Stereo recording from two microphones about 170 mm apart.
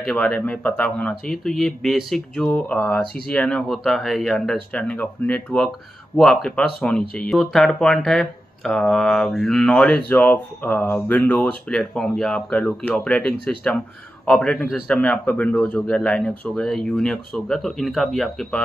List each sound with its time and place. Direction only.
0.0 s speech: 5° left (ahead or behind)